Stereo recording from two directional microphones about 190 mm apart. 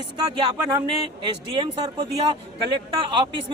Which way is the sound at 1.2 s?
25° right (ahead or behind).